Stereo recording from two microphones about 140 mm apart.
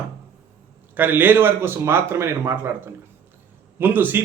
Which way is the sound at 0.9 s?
15° right (ahead or behind).